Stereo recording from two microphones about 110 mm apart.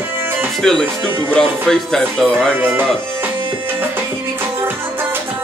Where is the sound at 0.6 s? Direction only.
5° left (ahead or behind).